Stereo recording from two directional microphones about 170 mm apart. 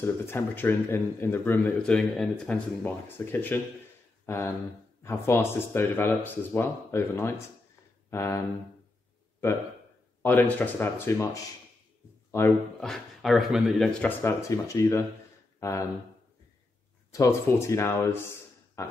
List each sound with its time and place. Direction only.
0.0 s speech: 15° left (ahead or behind)
10.2 s speech: 10° left (ahead or behind)
12.3 s speech: 15° left (ahead or behind)
12.8 s speech: centre (ahead or behind)
14.2 s speech: 15° left (ahead or behind)
17.1 s speech: 20° left (ahead or behind)